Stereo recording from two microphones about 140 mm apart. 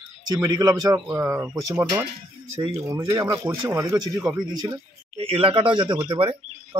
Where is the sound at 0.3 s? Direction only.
25° right (ahead or behind).